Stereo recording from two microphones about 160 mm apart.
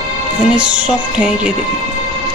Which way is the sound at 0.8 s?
5° right (ahead or behind).